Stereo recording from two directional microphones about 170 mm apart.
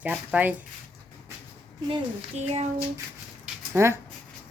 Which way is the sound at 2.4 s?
40° right (ahead or behind).